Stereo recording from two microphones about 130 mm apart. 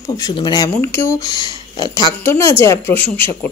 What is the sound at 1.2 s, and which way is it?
Speech, 35° left (ahead or behind).